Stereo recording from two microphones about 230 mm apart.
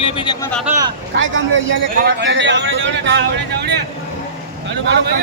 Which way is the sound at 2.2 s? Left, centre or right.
Right.